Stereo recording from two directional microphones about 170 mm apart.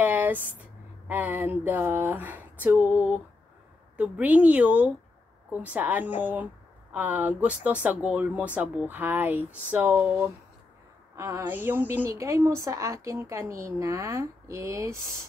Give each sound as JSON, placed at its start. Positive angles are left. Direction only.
{"t": 0.0, "sound": "a woman's voice", "side_deg": -10}